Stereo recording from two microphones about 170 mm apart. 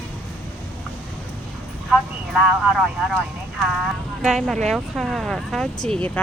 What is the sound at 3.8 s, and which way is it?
Speech, centre (ahead or behind).